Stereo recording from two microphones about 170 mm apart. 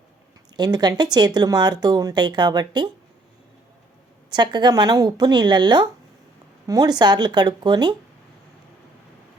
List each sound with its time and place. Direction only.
0.5 s speech: 25° right (ahead or behind)
4.3 s speech: 25° right (ahead or behind)